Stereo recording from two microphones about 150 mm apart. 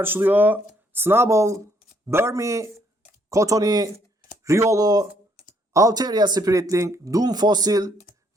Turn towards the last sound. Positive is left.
turn(degrees=-25)  # may be behind; listen again after turning